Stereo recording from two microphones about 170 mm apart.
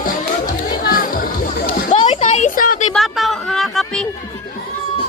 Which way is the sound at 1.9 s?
30° left (ahead or behind).